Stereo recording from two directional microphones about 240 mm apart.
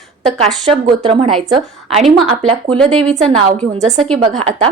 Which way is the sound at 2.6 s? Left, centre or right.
Centre.